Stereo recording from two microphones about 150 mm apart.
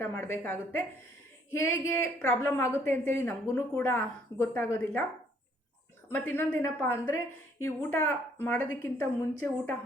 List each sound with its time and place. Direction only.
0.0 s speech: 15° left (ahead or behind)
6.1 s speech: 15° left (ahead or behind)